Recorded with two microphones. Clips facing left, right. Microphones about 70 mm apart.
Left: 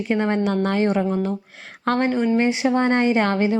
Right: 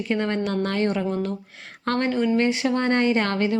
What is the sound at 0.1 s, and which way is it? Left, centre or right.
A woman's voice, left.